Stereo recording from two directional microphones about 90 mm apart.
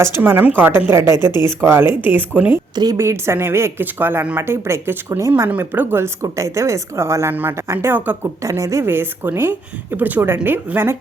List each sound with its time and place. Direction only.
0.2 s a woman's voice: 20° right (ahead or behind)
5.5 s a woman's voice: 20° right (ahead or behind)
6.2 s a woman's voice: 35° right (ahead or behind)
8.4 s a woman's voice: 35° right (ahead or behind)